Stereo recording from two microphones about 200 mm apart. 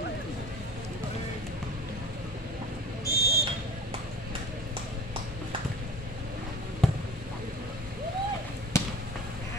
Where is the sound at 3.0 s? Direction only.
15° left (ahead or behind).